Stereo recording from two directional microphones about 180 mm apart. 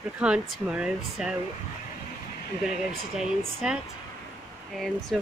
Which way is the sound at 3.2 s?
Centre (ahead or behind).